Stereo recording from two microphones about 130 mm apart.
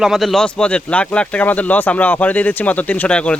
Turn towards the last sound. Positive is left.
turn(degrees=10)  # may be behind; listen again after turning